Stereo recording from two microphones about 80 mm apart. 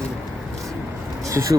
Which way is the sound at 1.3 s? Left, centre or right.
Right.